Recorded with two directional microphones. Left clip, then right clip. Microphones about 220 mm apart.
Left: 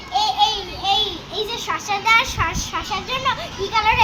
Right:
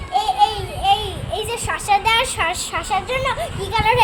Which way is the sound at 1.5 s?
50° right (ahead or behind).